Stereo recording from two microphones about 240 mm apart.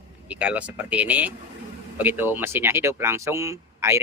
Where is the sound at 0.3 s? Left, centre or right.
Centre.